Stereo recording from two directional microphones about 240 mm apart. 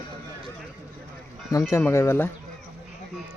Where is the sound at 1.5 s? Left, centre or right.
Centre.